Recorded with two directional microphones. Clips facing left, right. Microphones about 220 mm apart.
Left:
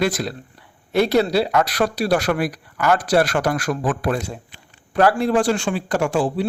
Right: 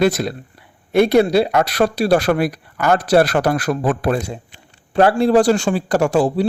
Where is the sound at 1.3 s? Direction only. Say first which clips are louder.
Right 3 dB; 25° right (ahead or behind).